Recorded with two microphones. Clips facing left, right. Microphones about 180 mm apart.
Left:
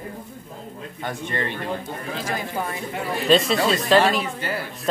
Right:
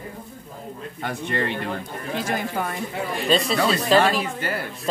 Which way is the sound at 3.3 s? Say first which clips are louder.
Left 2 dB; centre (ahead or behind).